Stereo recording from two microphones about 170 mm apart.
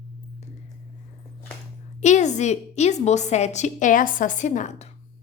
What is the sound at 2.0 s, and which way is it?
A woman's voice, 45° left (ahead or behind).